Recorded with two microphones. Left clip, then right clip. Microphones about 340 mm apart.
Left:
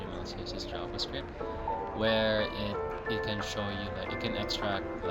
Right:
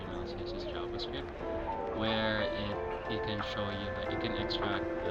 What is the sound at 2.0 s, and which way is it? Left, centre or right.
Speech, left.